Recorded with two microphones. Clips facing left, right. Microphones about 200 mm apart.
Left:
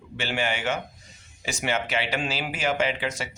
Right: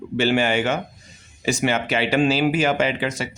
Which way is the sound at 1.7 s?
60° right (ahead or behind).